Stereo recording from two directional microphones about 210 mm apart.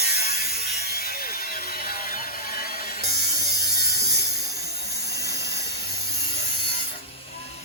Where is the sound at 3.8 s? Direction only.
50° left (ahead or behind).